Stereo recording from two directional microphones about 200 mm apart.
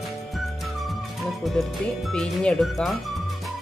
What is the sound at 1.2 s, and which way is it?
Speech, centre (ahead or behind).